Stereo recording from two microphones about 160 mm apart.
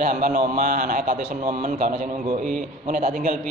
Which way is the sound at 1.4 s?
40° right (ahead or behind).